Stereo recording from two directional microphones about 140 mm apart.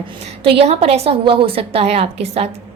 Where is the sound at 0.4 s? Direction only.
45° right (ahead or behind).